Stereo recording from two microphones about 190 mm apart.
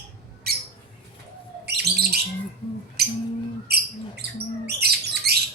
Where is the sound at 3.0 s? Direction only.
55° right (ahead or behind).